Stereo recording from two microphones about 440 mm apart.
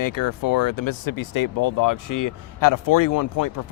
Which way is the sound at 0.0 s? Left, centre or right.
Left.